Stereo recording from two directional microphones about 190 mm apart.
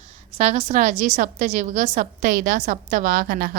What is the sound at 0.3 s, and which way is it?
A woman's voice, 40° right (ahead or behind).